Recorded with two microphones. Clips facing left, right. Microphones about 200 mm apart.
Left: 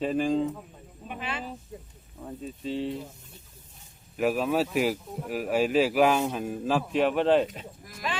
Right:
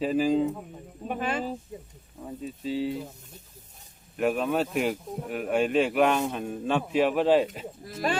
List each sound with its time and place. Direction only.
0.0 s speech: centre (ahead or behind)
1.0 s speech: 45° right (ahead or behind)
2.2 s speech: 5° right (ahead or behind)
4.2 s speech: centre (ahead or behind)
8.0 s speech: 45° right (ahead or behind)